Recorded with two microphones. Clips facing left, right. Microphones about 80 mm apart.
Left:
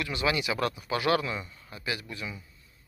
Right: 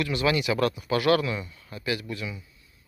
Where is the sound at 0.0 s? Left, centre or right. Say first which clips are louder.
Right 4 dB; centre.